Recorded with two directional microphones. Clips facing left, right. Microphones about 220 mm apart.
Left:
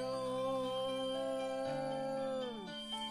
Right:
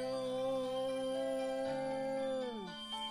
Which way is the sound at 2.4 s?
30° left (ahead or behind).